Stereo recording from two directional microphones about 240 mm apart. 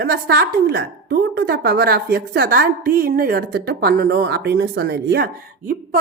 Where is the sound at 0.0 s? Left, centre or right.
Right.